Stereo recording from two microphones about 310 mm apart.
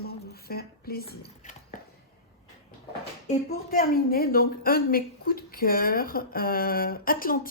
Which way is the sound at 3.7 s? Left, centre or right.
Left.